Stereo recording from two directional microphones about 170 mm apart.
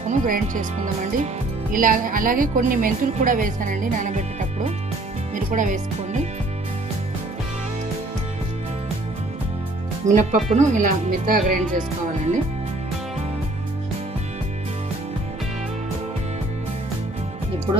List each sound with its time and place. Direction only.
0.1 s a woman's voice: 50° right (ahead or behind)
10.1 s a woman's voice: 45° right (ahead or behind)